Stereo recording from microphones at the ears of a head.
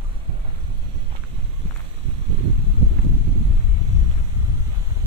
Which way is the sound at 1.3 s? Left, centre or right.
Right.